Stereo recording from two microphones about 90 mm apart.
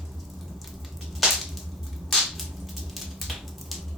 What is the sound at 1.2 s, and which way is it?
Whip, 5° right (ahead or behind).